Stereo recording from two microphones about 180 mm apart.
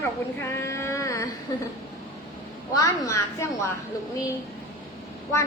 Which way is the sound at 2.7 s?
20° left (ahead or behind).